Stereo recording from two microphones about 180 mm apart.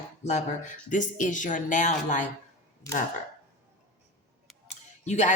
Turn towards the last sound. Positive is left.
turn(degrees=40)  # may be behind; listen again after turning